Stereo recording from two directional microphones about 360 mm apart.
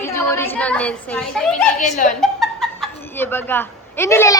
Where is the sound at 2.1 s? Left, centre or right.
Centre.